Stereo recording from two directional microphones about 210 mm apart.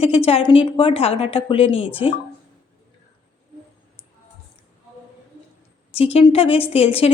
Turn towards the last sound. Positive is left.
turn(degrees=30)  # may be behind; listen again after turning